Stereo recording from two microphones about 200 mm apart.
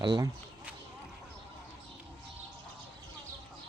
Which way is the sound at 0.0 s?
20° right (ahead or behind).